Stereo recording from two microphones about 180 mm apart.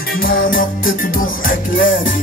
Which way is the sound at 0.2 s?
50° left (ahead or behind).